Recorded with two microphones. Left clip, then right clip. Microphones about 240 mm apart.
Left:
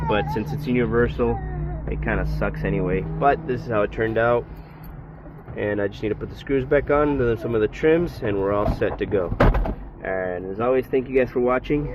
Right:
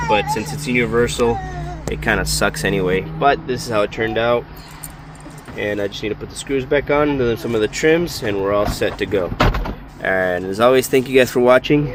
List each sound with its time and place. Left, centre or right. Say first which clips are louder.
0.1 s speech: right 5 dB; centre
1.9 s speech: right 8 dB; right; by 4.4 s centre
5.5 s speech: right 3 dB; centre
10.0 s speech: right 8 dB; right